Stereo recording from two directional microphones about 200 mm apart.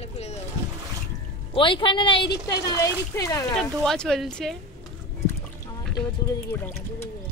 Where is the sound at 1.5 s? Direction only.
25° left (ahead or behind).